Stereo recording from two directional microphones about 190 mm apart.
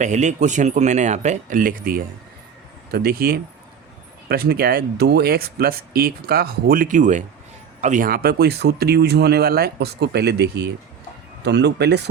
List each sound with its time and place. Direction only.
0.0 s speech: 40° right (ahead or behind); by 12.0 s 60° right (ahead or behind)